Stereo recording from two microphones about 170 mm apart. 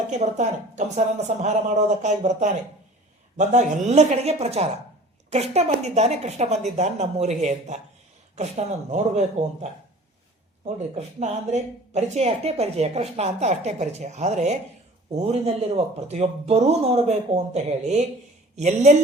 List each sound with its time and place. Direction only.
0.1 s speech: 45° right (ahead or behind)